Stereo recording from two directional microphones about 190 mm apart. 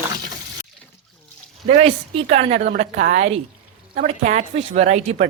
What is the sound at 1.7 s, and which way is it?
A woman's voice, 35° right (ahead or behind).